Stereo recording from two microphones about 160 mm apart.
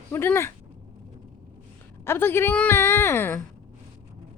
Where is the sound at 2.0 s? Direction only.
15° left (ahead or behind).